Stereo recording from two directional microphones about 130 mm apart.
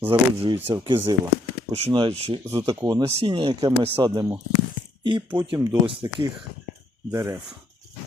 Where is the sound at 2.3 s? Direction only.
30° right (ahead or behind).